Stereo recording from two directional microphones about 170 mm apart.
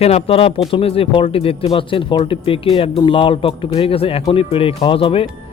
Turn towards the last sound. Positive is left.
turn(degrees=35)  # may be behind; listen again after turning